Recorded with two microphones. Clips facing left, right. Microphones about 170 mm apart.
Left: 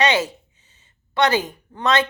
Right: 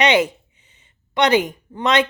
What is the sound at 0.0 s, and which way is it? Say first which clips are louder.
A woman's voice: right 3 dB; 20° right (ahead or behind).